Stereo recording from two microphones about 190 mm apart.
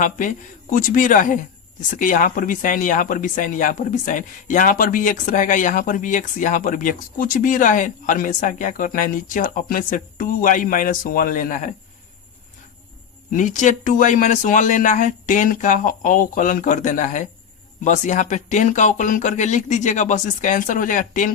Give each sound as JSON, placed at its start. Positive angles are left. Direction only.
{"t": 0.0, "sound": "speech", "side_deg": 45}
{"t": 13.3, "sound": "speech", "side_deg": 40}